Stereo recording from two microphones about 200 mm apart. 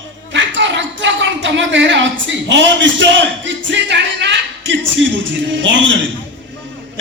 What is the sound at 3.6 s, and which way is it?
Music, 60° right (ahead or behind).